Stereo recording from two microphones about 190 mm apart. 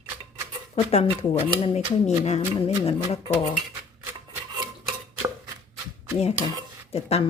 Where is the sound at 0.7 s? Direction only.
30° left (ahead or behind).